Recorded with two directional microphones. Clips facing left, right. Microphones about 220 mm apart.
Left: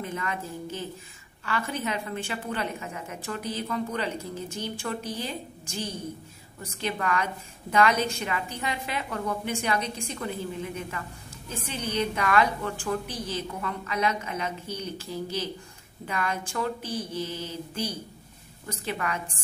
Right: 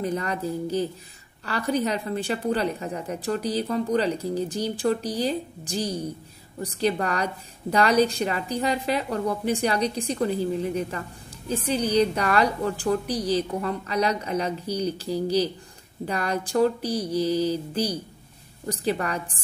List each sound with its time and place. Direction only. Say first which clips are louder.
0.0 s a woman's voice: right 6 dB; 35° right (ahead or behind)